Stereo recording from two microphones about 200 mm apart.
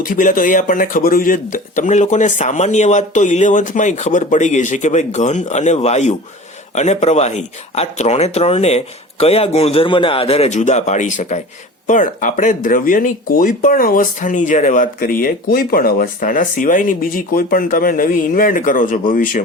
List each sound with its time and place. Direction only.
0.0 s speech: 45° left (ahead or behind)